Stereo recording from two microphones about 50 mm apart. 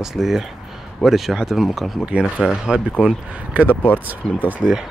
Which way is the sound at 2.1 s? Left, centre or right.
Right.